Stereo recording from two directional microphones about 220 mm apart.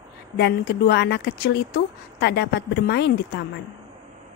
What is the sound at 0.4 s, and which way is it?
A woman's voice, 50° left (ahead or behind).